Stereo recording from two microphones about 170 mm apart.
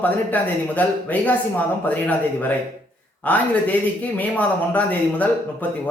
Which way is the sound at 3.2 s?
10° left (ahead or behind).